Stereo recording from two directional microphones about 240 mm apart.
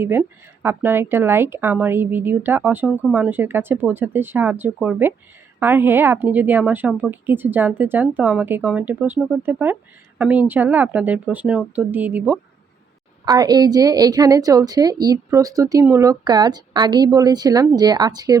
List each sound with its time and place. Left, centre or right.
0.0 s a woman's voice: centre